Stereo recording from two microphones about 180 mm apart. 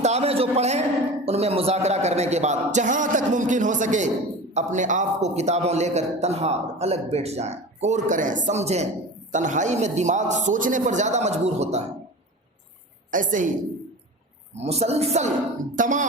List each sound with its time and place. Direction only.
0.0 s a man's voice: 35° right (ahead or behind)
13.1 s a woman's voice: 45° right (ahead or behind)
14.5 s a man's voice: 35° right (ahead or behind)